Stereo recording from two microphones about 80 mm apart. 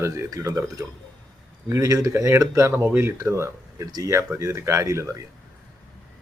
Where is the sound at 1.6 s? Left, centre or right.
Right.